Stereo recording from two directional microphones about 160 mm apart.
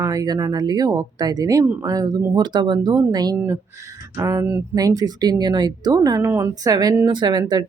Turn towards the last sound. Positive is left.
turn(degrees=-25)  # may be behind; listen again after turning